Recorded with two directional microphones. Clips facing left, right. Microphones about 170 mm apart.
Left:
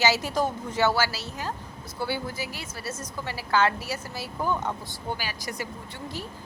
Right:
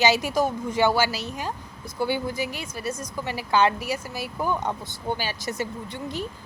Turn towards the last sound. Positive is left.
turn(degrees=-20)  # may be behind; listen again after turning